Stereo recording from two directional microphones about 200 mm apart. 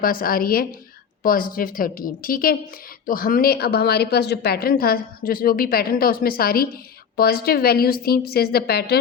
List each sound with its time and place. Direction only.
0.0 s a woman's voice: 45° left (ahead or behind)